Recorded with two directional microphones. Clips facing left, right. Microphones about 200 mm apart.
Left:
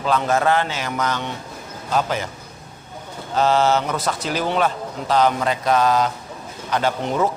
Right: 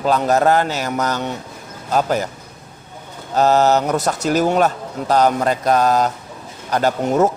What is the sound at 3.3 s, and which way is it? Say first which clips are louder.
A man's voice: right 3 dB; 40° right (ahead or behind).